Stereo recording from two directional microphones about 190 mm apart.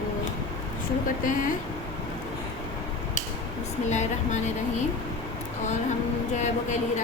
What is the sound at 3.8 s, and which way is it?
Speech, 40° left (ahead or behind).